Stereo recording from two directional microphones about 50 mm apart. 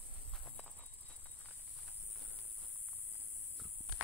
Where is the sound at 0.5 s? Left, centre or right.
Left.